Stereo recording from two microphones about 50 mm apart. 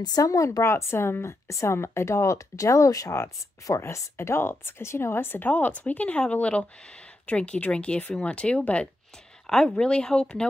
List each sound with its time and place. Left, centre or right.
0.2 s speech: left
1.2 s speech: left
3.7 s speech: left
9.5 s speech: centre